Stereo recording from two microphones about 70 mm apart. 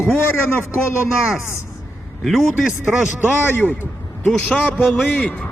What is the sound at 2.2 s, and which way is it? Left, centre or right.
Speech, centre.